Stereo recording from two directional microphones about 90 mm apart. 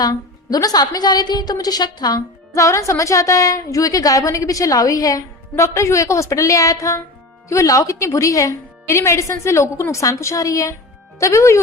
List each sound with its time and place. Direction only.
0.0 s a woman's voice: 45° left (ahead or behind)